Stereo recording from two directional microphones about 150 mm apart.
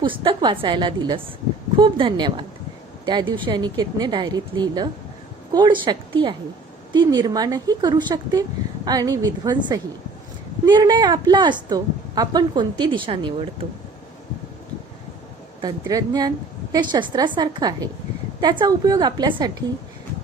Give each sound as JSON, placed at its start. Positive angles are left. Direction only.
{"t": 0.0, "sound": "a woman's voice", "side_deg": -35}
{"t": 15.6, "sound": "speech", "side_deg": -25}